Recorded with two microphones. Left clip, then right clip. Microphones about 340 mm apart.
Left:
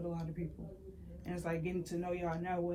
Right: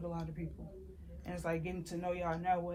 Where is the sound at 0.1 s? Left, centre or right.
Centre.